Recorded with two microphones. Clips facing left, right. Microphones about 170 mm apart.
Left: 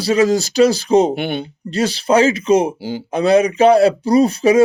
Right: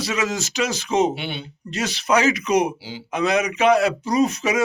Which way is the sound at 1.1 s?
50° left (ahead or behind).